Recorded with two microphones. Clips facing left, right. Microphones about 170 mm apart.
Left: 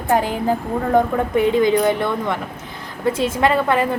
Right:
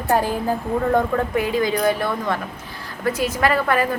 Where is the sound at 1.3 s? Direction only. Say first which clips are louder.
Left 8 dB; 25° left (ahead or behind).